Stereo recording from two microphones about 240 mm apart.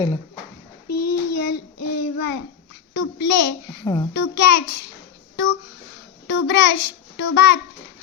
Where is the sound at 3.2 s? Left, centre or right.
Left.